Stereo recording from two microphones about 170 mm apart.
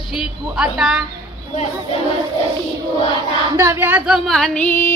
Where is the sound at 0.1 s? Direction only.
5° right (ahead or behind).